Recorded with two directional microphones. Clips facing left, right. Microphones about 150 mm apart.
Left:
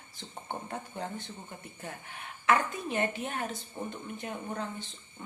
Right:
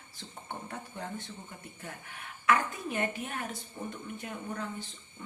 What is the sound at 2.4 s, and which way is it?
A woman's voice, 25° left (ahead or behind).